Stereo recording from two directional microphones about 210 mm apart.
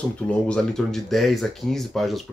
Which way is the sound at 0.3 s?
5° left (ahead or behind).